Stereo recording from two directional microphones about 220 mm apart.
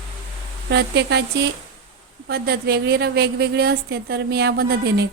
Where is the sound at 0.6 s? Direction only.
50° right (ahead or behind).